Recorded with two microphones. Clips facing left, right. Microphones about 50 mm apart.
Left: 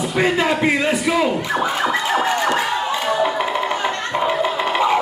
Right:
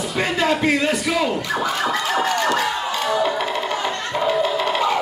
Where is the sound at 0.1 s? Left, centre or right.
Left.